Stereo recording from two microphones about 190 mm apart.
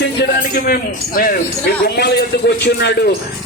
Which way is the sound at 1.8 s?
60° left (ahead or behind).